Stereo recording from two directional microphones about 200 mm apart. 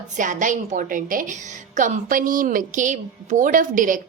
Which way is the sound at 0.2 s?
40° right (ahead or behind).